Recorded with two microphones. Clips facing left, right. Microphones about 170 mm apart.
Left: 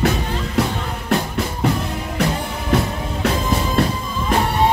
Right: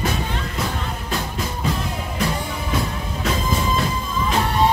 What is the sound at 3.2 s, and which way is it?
Music, 65° left (ahead or behind).